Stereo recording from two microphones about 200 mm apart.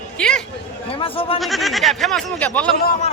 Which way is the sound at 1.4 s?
Centre (ahead or behind).